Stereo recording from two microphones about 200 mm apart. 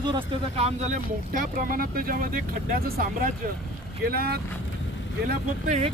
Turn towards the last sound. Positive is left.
turn(degrees=-35)  # may be behind; listen again after turning